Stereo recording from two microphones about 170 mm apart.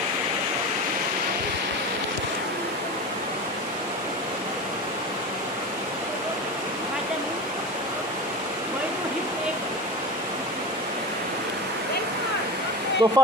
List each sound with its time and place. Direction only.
13.0 s speech: 20° right (ahead or behind)